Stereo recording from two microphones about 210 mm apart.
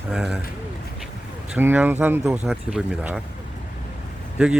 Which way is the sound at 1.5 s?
10° right (ahead or behind).